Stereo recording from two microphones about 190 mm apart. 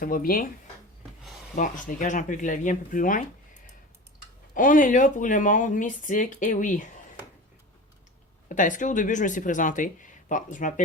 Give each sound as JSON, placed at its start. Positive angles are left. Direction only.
{"t": 0.0, "sound": "speech", "side_deg": 50}
{"t": 1.5, "sound": "speech", "side_deg": 45}
{"t": 4.5, "sound": "speech", "side_deg": 45}
{"t": 8.4, "sound": "speech", "side_deg": 45}